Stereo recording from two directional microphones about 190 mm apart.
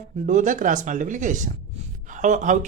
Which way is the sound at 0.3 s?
40° right (ahead or behind).